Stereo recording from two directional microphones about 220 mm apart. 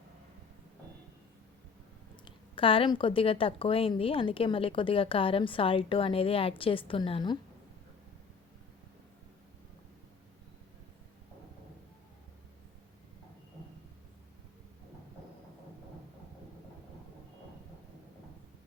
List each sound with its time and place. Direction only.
2.2 s a woman's voice: 25° left (ahead or behind)